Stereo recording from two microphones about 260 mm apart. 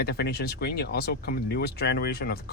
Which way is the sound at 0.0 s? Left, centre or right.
Left.